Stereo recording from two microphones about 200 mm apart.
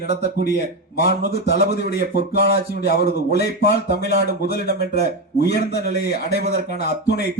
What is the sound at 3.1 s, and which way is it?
A man's voice, 55° left (ahead or behind).